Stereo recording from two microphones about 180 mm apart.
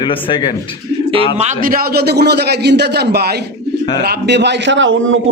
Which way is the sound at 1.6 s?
55° right (ahead or behind).